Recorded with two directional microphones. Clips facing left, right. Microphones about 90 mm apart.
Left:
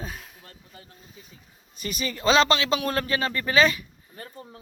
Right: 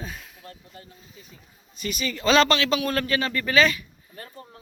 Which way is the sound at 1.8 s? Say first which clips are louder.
Right 1 dB; 35° left (ahead or behind).